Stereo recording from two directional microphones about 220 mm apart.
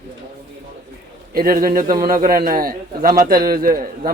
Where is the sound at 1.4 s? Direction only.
40° right (ahead or behind).